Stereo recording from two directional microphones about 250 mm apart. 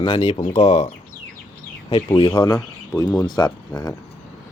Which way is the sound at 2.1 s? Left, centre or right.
Centre.